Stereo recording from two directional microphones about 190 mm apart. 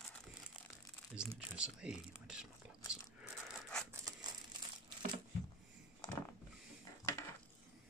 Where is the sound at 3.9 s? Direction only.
20° right (ahead or behind).